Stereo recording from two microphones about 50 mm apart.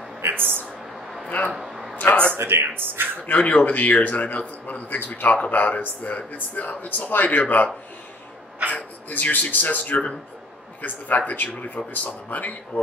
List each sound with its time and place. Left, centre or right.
0.2 s speech: right
1.5 s a sound: centre
2.0 s a man's voice: left
2.3 s speech: right
3.3 s a man's voice: left
8.7 s a man's voice: left